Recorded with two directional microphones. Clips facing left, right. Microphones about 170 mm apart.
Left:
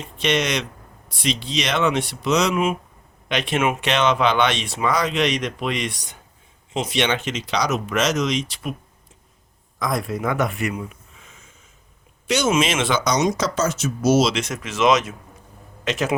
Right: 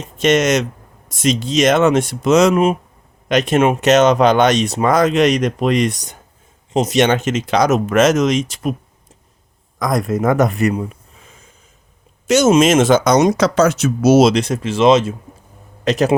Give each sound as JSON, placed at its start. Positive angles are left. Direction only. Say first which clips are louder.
{"t": 0.2, "sound": "speech", "louder": "right 8 dB", "side_deg": -45}
{"t": 9.7, "sound": "speech", "louder": "right 6 dB", "side_deg": -45}
{"t": 14.3, "sound": "a man's voice", "louder": "right 9 dB", "side_deg": -35}